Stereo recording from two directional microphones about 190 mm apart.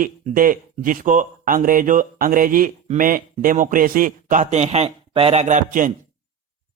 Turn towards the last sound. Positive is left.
turn(degrees=-40)  # may be behind; listen again after turning